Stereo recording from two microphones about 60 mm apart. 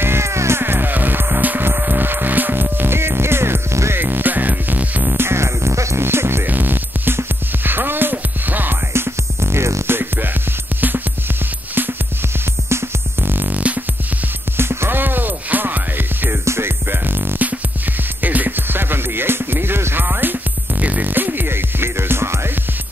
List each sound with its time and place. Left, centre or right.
0.0 s music: right
4.0 s music: right
5.1 s music: right
6.4 s music: right
8.9 s music: right
12.6 s music: right
14.6 s music: right